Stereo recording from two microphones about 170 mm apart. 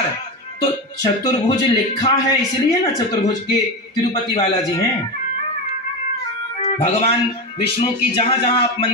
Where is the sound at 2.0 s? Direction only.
25° left (ahead or behind).